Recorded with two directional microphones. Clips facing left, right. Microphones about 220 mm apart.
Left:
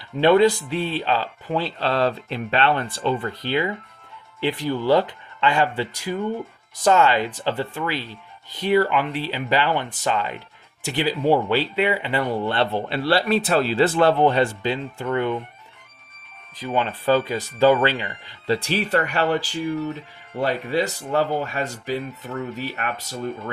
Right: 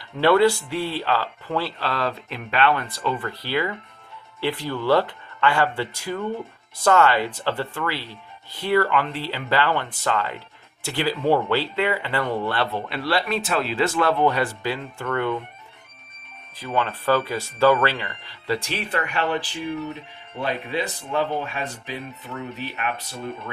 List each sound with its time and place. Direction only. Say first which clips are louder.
0.2 s speech: left 2 dB; 20° left (ahead or behind)
12.5 s speech: left 3 dB; 30° left (ahead or behind)
16.6 s speech: left 1 dB; 20° left (ahead or behind); by 22.9 s 50° left (ahead or behind)